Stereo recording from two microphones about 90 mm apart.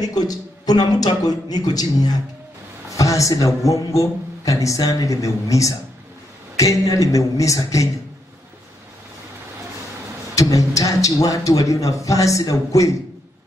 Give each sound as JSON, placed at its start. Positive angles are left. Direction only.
{"t": 0.0, "sound": "a man's voice", "side_deg": 45}
{"t": 10.3, "sound": "speech", "side_deg": 40}